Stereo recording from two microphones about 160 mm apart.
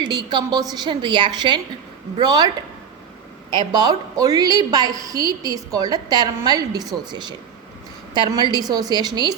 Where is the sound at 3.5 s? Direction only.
25° right (ahead or behind).